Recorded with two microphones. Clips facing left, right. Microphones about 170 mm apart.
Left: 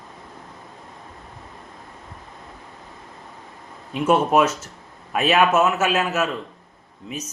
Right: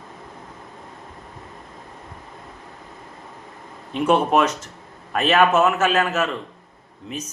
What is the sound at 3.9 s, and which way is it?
Speech, 5° left (ahead or behind).